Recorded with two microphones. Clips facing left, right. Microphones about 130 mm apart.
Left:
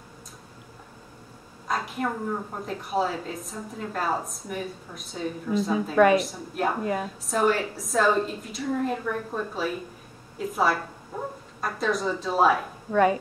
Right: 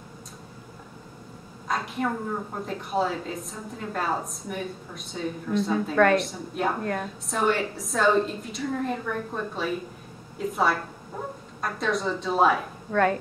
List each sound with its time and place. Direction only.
1.7 s a woman's voice: centre (ahead or behind)
11.1 s dog: centre (ahead or behind)
11.6 s a woman's voice: centre (ahead or behind)